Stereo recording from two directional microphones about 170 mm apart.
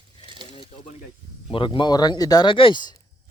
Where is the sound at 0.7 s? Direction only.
35° left (ahead or behind).